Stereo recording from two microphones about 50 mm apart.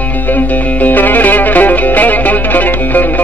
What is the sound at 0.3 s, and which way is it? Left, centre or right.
Music, left.